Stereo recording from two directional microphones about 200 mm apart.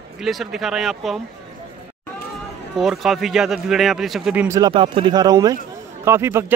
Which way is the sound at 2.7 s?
Centre (ahead or behind).